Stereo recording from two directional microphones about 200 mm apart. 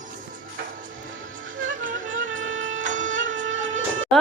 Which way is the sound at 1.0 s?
75° right (ahead or behind).